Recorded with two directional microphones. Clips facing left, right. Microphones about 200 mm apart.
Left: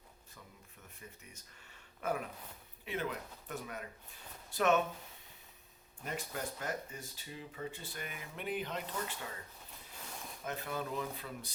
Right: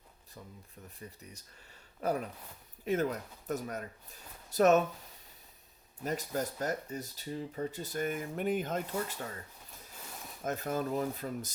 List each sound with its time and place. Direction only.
0.9 s speech: 35° right (ahead or behind)
2.0 s gasp: 35° right (ahead or behind)
2.8 s speech: 45° right (ahead or behind)
6.1 s speech: 40° right (ahead or behind)
10.4 s speech: 45° right (ahead or behind)